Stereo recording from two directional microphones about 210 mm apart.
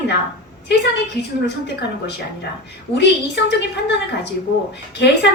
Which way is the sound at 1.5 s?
55° left (ahead or behind).